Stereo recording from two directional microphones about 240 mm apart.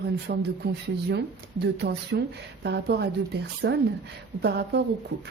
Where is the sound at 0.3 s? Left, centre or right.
Right.